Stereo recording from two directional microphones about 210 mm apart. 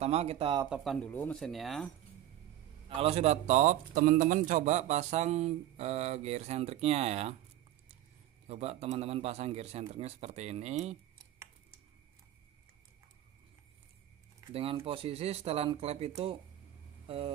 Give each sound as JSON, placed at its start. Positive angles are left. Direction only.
{"t": 0.0, "sound": "speech", "side_deg": -30}
{"t": 0.7, "sound": "speech", "side_deg": 0}
{"t": 3.0, "sound": "a man's voice", "side_deg": -30}
{"t": 8.5, "sound": "a man's voice", "side_deg": -30}
{"t": 14.5, "sound": "speech", "side_deg": -25}
{"t": 17.1, "sound": "speech", "side_deg": -25}